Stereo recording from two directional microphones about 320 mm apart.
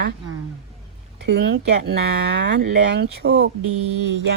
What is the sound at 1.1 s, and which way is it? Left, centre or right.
Speech, right.